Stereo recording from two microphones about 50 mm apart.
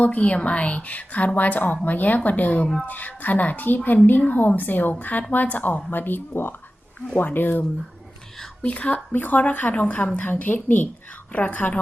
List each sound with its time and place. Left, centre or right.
0.0 s a woman's voice: left
8.6 s a woman's voice: left
10.2 s a woman's voice: left